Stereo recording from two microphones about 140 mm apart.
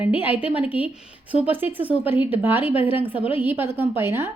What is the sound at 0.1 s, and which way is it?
A woman's voice, 15° right (ahead or behind).